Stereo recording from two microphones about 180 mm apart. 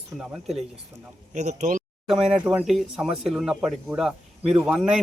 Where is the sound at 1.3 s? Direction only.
40° right (ahead or behind).